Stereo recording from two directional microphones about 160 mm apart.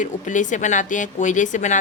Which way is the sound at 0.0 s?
50° left (ahead or behind).